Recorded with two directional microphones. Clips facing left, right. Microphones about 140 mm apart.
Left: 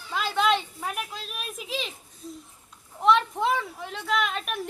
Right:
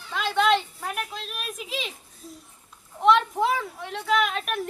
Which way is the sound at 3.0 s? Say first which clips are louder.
Right 2 dB; centre (ahead or behind).